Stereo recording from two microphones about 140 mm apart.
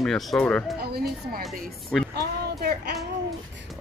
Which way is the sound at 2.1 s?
90° right.